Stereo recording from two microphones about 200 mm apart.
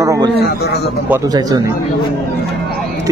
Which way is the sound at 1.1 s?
20° right (ahead or behind).